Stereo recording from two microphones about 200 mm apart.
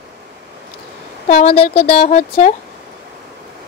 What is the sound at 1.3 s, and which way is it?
Speech, 30° left (ahead or behind).